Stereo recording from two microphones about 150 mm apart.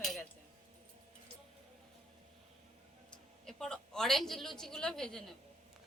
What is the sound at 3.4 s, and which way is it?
A woman's voice, 5° left (ahead or behind).